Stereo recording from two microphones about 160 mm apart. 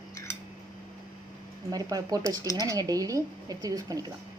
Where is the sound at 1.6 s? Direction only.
20° right (ahead or behind).